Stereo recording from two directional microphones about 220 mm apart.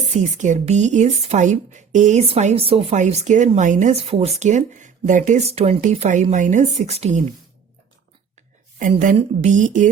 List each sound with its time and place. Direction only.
0.3 s speech: 35° right (ahead or behind)
8.8 s speech: 35° right (ahead or behind)